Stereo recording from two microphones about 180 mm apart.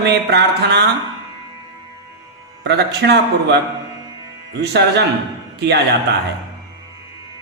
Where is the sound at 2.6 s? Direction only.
70° right (ahead or behind).